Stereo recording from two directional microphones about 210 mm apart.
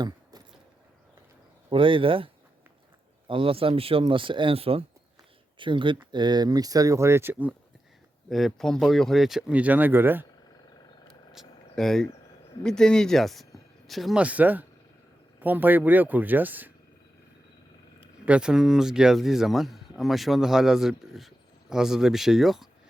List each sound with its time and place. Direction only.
0.0 s keys jangling: 20° right (ahead or behind)
1.7 s speech: 25° right (ahead or behind)
11.1 s a sound: centre (ahead or behind)
12.6 s speech: 5° left (ahead or behind)
18.3 s speech: 5° right (ahead or behind)